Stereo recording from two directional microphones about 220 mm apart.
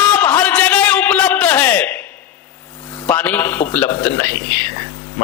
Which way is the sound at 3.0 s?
5° left (ahead or behind).